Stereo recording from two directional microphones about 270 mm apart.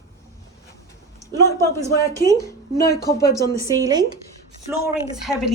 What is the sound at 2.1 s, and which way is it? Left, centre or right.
Speech, centre.